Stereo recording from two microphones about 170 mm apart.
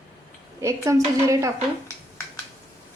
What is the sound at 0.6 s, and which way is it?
Speech, 20° right (ahead or behind).